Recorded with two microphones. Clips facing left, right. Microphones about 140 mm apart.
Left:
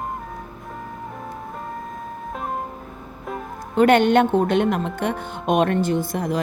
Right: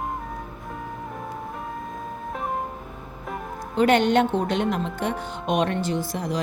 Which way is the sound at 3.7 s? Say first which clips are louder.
Left 4 dB; 55° left (ahead or behind).